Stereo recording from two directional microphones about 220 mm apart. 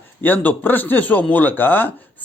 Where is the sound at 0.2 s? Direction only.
10° left (ahead or behind).